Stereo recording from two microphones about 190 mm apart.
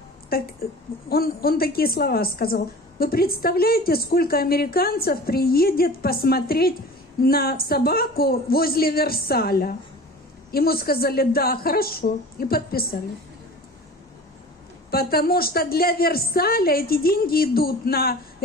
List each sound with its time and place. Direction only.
0.3 s a woman's voice: 50° left (ahead or behind)
14.9 s a woman's voice: 50° left (ahead or behind)